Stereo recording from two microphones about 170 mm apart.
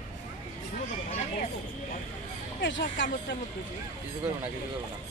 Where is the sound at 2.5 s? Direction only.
90° left.